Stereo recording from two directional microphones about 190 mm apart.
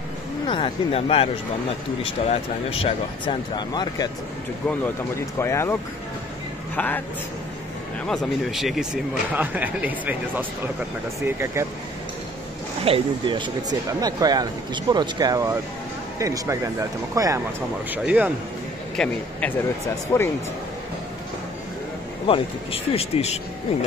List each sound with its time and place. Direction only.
0.5 s speech: 30° left (ahead or behind)
5.4 s a man's voice: 15° left (ahead or behind)
8.1 s speech: centre (ahead or behind)
12.8 s speech: 25° right (ahead or behind); by 18.3 s 10° right (ahead or behind)
18.9 s speech: 10° left (ahead or behind)
22.2 s speech: 30° left (ahead or behind)